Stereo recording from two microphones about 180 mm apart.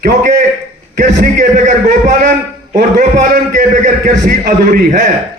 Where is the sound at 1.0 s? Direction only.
45° right (ahead or behind).